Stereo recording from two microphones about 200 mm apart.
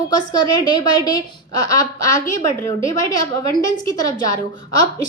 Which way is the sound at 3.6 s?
20° left (ahead or behind).